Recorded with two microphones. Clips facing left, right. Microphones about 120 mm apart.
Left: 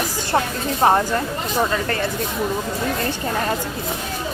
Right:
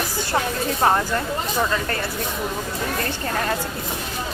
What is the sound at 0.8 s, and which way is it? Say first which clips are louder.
Speech: left 3 dB; 25° left (ahead or behind).